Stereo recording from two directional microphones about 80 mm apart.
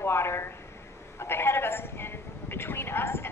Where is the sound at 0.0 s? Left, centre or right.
Left.